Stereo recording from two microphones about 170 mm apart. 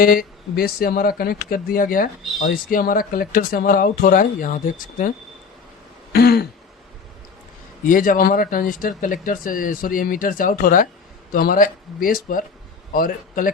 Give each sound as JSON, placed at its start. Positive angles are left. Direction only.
{"t": 0.0, "sound": "speech", "side_deg": 60}
{"t": 6.1, "sound": "speech", "side_deg": 65}
{"t": 7.9, "sound": "a man's voice", "side_deg": 55}